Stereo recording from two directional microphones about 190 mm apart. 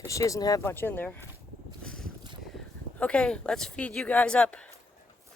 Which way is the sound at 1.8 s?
5° left (ahead or behind).